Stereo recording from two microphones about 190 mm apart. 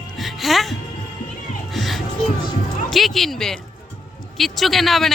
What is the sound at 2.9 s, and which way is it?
Speech, centre (ahead or behind).